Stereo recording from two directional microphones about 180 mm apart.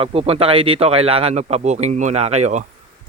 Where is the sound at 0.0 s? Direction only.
30° right (ahead or behind).